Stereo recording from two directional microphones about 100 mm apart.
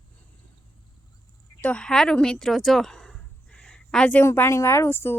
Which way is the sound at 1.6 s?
10° left (ahead or behind).